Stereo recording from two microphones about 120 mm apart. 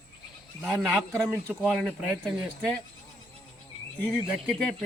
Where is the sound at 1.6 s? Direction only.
Centre (ahead or behind).